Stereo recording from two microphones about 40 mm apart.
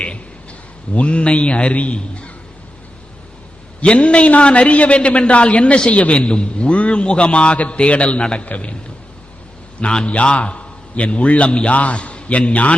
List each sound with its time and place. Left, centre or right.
0.9 s a man's voice: left
3.8 s a man's voice: left
9.8 s a man's voice: left